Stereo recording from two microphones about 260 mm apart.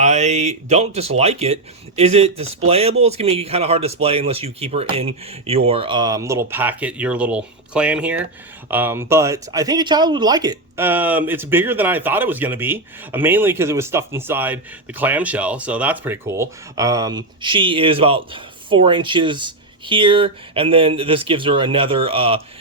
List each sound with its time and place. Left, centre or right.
0.0 s speech: right